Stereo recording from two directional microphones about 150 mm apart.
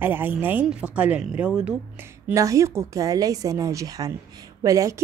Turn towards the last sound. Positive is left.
turn(degrees=-20)  # may be behind; listen again after turning